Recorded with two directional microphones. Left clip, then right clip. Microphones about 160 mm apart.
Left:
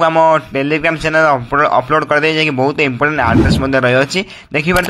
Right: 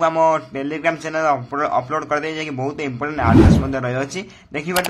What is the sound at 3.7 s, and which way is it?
A man's voice, 35° left (ahead or behind).